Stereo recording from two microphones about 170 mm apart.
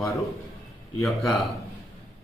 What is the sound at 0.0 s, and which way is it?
Speech, 20° left (ahead or behind).